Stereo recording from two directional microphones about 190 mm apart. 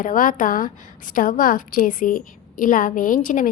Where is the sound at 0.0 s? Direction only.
45° left (ahead or behind).